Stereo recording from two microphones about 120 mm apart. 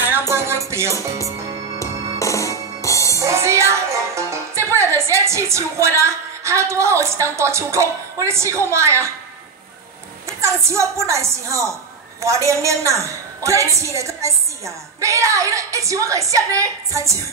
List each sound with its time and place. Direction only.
0.3 s music: 25° right (ahead or behind)
0.9 s speech: 25° left (ahead or behind)
1.8 s music: 25° left (ahead or behind)
3.2 s music: 25° right (ahead or behind)
7.3 s a woman's voice: 25° right (ahead or behind)
10.2 s a woman's voice: 25° right (ahead or behind)